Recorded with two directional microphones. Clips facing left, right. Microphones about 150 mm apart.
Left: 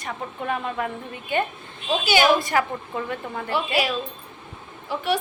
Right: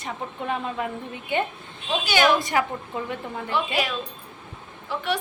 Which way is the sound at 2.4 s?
20° right (ahead or behind).